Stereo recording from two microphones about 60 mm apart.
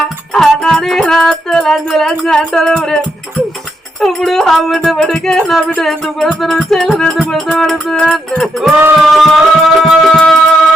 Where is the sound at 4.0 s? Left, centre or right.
Centre.